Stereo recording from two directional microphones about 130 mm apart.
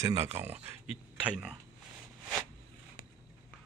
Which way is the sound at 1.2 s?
5° right (ahead or behind).